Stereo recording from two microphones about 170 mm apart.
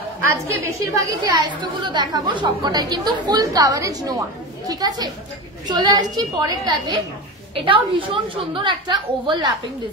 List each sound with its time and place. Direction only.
0.3 s a woman's voice: 15° right (ahead or behind)